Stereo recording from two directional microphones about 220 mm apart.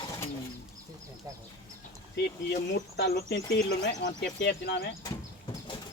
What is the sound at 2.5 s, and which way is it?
Speech, 50° left (ahead or behind).